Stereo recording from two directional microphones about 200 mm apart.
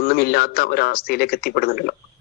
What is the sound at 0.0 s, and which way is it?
Speech, 50° left (ahead or behind).